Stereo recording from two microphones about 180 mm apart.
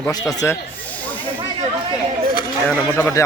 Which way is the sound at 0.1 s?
20° left (ahead or behind).